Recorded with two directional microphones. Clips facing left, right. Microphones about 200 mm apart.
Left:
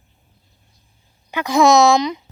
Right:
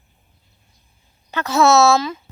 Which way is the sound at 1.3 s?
15° left (ahead or behind).